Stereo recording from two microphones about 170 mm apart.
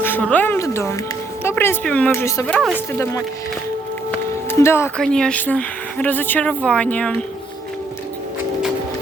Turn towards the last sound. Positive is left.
turn(degrees=5)  # may be behind; listen again after turning